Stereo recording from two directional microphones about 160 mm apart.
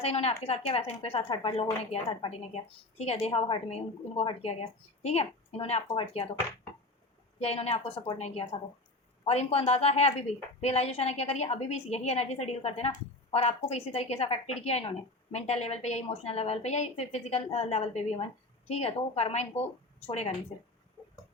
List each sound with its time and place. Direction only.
0.0 s a woman's voice: 40° left (ahead or behind)
7.3 s a woman's voice: 40° left (ahead or behind)